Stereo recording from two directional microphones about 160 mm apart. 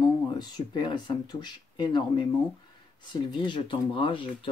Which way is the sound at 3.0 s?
30° left (ahead or behind).